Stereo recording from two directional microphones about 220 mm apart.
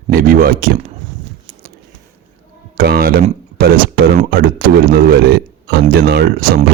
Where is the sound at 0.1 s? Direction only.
40° right (ahead or behind).